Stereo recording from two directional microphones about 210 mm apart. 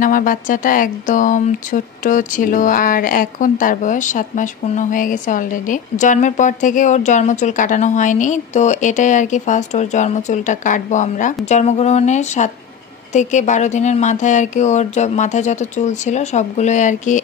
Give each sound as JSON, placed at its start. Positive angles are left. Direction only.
{"t": 0.0, "sound": "speech", "side_deg": 40}